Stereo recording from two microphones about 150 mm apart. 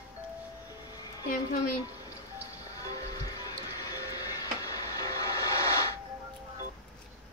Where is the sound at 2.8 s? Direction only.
25° left (ahead or behind).